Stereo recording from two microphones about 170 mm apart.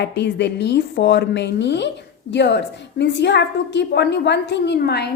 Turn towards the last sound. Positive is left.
turn(degrees=75)  # may be behind; listen again after turning